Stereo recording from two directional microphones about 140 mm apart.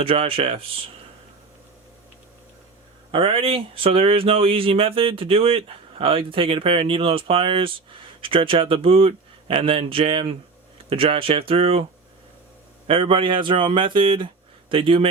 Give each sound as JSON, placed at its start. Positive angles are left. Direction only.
{"t": 0.0, "sound": "speech", "side_deg": -40}
{"t": 3.1, "sound": "speech", "side_deg": -40}
{"t": 12.9, "sound": "speech", "side_deg": -40}